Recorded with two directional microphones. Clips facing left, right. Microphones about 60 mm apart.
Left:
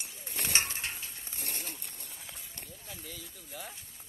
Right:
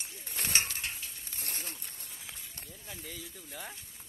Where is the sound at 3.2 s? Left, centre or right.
Centre.